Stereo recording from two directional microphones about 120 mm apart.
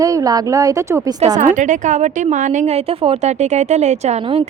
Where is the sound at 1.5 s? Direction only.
90° right.